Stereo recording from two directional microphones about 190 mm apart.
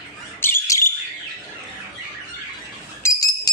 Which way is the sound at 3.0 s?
15° left (ahead or behind).